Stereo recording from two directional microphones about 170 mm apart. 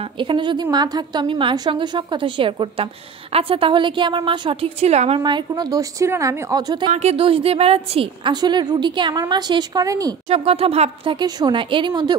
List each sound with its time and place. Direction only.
0.2 s a woman's voice: 30° right (ahead or behind)
5.2 s a woman's voice: 25° right (ahead or behind)
6.9 s a woman's voice: 40° right (ahead or behind); by 10.1 s 20° right (ahead or behind)
10.3 s a woman's voice: 35° right (ahead or behind)